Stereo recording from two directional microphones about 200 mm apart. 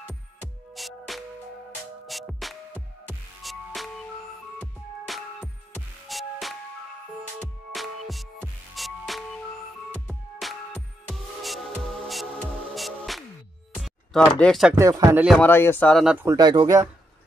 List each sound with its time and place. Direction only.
0.7 s music: centre (ahead or behind)
7.7 s music: centre (ahead or behind)
10.4 s music: centre (ahead or behind)
12.1 s music: centre (ahead or behind)
13.7 s speech: centre (ahead or behind)
14.8 s speech: 15° right (ahead or behind)
15.2 s speech: 5° left (ahead or behind)
16.3 s speech: 20° right (ahead or behind)